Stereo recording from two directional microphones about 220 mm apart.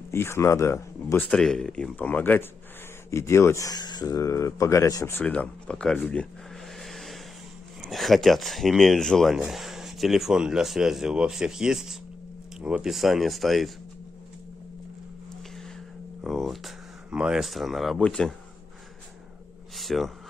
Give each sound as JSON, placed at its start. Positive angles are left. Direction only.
{"t": 0.1, "sound": "speech", "side_deg": 10}
{"t": 6.8, "sound": "vehicle", "side_deg": 0}
{"t": 7.8, "sound": "speech", "side_deg": 0}
{"t": 16.3, "sound": "speech", "side_deg": 0}
{"t": 19.7, "sound": "a sound", "side_deg": 0}